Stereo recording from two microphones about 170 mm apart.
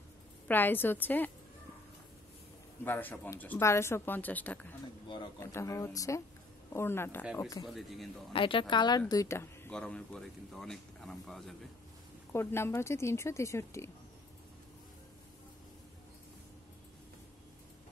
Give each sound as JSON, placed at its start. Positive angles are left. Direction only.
{"t": 0.5, "sound": "speech", "side_deg": 10}
{"t": 2.8, "sound": "speech", "side_deg": 10}
{"t": 5.0, "sound": "a man's voice", "side_deg": 25}
{"t": 5.4, "sound": "speech", "side_deg": 15}
{"t": 7.6, "sound": "speech", "side_deg": 0}
{"t": 8.3, "sound": "speech", "side_deg": 30}
{"t": 12.3, "sound": "speech", "side_deg": 15}